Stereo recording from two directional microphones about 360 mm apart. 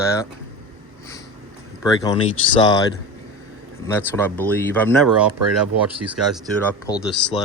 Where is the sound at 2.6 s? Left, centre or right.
Centre.